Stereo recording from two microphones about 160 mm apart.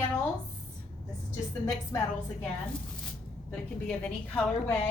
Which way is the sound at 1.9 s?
20° left (ahead or behind).